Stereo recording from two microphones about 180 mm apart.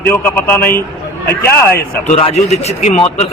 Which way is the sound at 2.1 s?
35° left (ahead or behind).